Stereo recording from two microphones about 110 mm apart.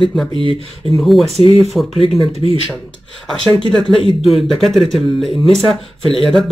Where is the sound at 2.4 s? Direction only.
60° right (ahead or behind).